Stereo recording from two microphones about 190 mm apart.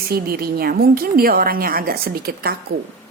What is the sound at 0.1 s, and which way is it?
Speech, 50° right (ahead or behind).